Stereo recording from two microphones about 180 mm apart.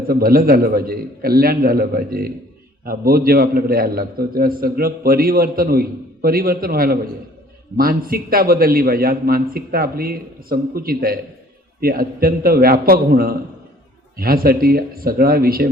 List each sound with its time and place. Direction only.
0.1 s a man's voice: 55° right (ahead or behind)